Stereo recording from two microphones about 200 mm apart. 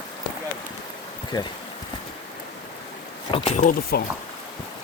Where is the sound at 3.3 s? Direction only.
30° left (ahead or behind).